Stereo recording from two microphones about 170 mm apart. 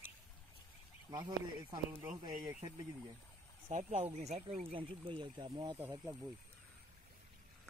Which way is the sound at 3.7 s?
40° right (ahead or behind).